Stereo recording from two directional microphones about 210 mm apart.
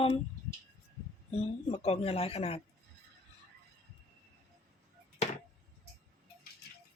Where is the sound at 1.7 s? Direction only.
30° left (ahead or behind).